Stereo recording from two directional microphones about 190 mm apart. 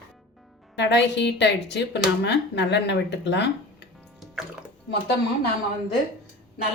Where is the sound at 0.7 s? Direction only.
65° left (ahead or behind).